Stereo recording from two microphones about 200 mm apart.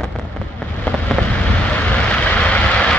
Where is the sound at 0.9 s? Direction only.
5° left (ahead or behind).